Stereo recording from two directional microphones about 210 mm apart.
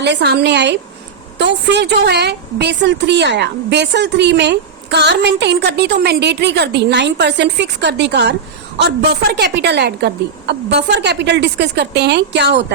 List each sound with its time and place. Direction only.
0.0 s a woman's voice: 55° right (ahead or behind)